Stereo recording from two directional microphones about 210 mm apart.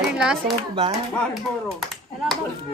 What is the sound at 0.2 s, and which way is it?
Speech, 5° right (ahead or behind).